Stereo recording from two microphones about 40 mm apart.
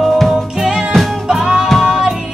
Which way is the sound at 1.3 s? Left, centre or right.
Centre.